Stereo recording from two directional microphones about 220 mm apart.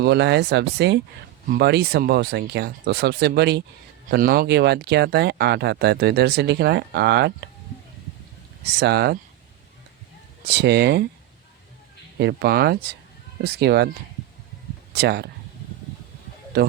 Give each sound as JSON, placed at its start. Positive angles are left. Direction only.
{"t": 0.0, "sound": "speech", "side_deg": -50}
{"t": 8.6, "sound": "speech", "side_deg": -45}
{"t": 10.5, "sound": "speech", "side_deg": -50}
{"t": 12.2, "sound": "speech", "side_deg": -45}
{"t": 14.9, "sound": "speech", "side_deg": -50}